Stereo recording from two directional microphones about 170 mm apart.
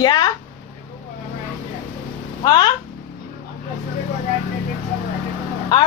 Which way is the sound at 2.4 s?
25° left (ahead or behind).